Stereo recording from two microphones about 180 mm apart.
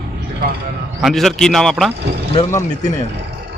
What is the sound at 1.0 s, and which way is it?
Speech, centre (ahead or behind).